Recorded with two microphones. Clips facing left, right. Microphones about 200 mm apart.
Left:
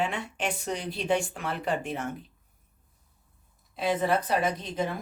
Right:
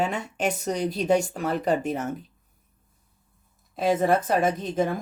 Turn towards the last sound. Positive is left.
turn(degrees=-45)  # may be behind; listen again after turning